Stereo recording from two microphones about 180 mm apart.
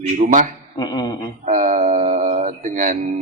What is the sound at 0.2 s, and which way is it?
Speech, 50° right (ahead or behind).